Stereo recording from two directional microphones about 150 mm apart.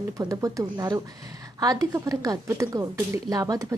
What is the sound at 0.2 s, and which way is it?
A woman's voice, 25° right (ahead or behind).